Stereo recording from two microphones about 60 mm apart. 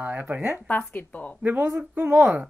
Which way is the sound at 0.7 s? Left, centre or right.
Left.